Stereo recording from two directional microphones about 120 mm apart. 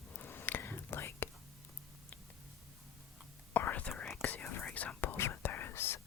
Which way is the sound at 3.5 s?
15° left (ahead or behind).